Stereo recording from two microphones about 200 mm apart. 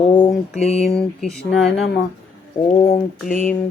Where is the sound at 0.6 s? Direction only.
30° left (ahead or behind).